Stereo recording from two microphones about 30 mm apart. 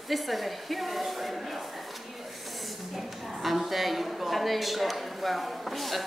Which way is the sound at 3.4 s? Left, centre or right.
Centre.